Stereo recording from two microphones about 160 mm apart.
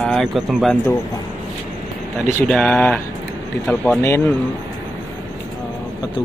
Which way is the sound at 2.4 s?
5° left (ahead or behind).